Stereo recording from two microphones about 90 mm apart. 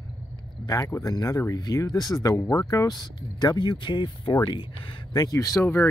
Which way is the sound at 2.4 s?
30° left (ahead or behind).